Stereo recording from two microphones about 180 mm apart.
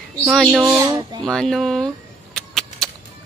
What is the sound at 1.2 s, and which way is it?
Speech, centre (ahead or behind).